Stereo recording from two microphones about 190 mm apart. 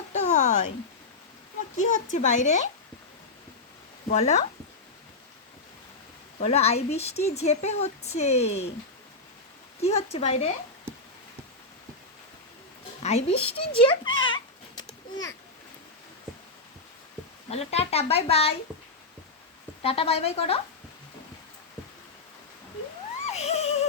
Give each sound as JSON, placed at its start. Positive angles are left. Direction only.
{"t": 0.1, "sound": "a sound", "side_deg": 35}
{"t": 1.7, "sound": "speech", "side_deg": 40}
{"t": 4.1, "sound": "speech", "side_deg": 35}
{"t": 6.4, "sound": "speech", "side_deg": 35}
{"t": 9.8, "sound": "speech", "side_deg": 30}
{"t": 13.0, "sound": "a sound", "side_deg": 35}
{"t": 17.5, "sound": "speech", "side_deg": 35}
{"t": 19.8, "sound": "speech", "side_deg": 30}
{"t": 23.2, "sound": "a sound", "side_deg": 35}